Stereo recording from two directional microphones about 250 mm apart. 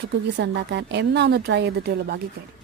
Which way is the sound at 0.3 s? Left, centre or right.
Right.